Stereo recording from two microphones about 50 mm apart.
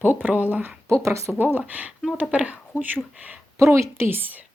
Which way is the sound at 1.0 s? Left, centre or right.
Right.